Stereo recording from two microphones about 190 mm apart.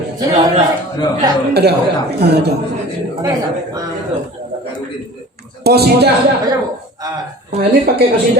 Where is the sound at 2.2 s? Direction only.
60° right (ahead or behind).